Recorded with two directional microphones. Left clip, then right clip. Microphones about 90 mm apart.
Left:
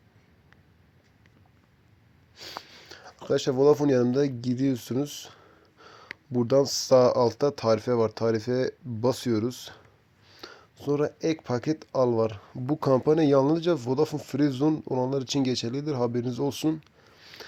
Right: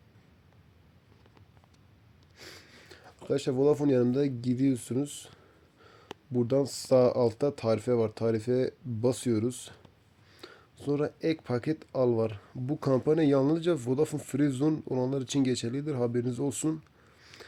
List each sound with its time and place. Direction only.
2.5 s a sound: 15° left (ahead or behind)
4.0 s speech: 20° left (ahead or behind)
5.8 s sniff: 30° left (ahead or behind)
6.5 s speech: 35° left (ahead or behind)
6.8 s speech: 20° left (ahead or behind)
10.4 s a sound: 20° left (ahead or behind)
11.4 s speech: 25° left (ahead or behind)
13.6 s speech: 10° left (ahead or behind)
15.1 s speech: 20° left (ahead or behind)
17.2 s sniff: 5° left (ahead or behind)